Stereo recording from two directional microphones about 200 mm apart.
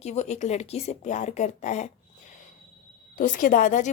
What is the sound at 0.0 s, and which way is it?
A woman's voice, 35° left (ahead or behind).